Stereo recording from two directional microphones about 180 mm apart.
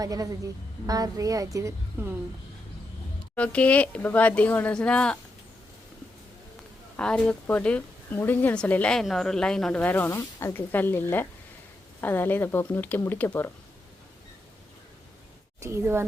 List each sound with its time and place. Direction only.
0.0 s a woman's voice: 20° right (ahead or behind)
3.3 s speech: 5° left (ahead or behind)
6.9 s speech: 5° left (ahead or behind)
15.6 s speech: 15° right (ahead or behind)